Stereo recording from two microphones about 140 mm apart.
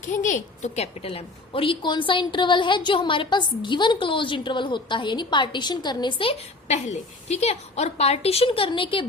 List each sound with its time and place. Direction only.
0.0 s a woman's voice: 60° left (ahead or behind); by 6.3 s 35° left (ahead or behind)
6.7 s a woman's voice: 55° left (ahead or behind); by 9.0 s 40° left (ahead or behind)